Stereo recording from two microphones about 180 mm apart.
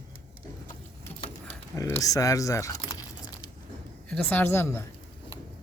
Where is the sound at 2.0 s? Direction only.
20° left (ahead or behind).